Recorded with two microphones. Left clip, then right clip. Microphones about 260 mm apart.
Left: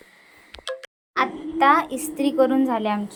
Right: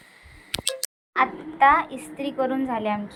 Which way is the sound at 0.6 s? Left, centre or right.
Centre.